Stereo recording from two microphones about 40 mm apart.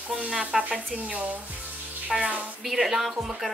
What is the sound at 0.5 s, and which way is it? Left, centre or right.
Speech, centre.